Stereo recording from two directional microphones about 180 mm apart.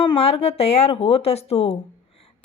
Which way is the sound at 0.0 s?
30° left (ahead or behind).